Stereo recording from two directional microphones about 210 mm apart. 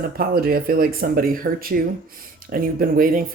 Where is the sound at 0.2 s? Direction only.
45° right (ahead or behind).